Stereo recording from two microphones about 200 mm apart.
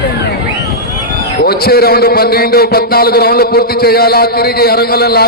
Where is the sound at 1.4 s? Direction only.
50° left (ahead or behind).